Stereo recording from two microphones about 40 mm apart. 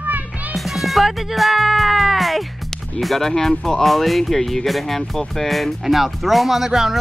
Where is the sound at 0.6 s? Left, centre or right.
Centre.